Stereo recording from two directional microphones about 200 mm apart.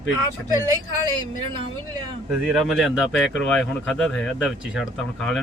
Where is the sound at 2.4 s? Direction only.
Centre (ahead or behind).